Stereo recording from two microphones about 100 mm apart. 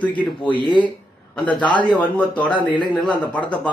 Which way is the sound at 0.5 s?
55° left (ahead or behind).